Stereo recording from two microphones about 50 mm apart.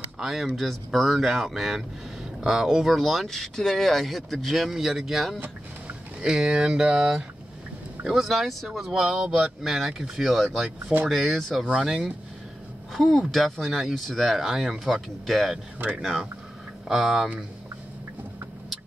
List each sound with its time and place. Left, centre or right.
0.2 s speech: centre
0.6 s speech: centre
6.2 s speech: centre
8.2 s speech: centre
11.7 s speech: centre
12.9 s speech: centre
14.4 s speech: centre
16.8 s speech: centre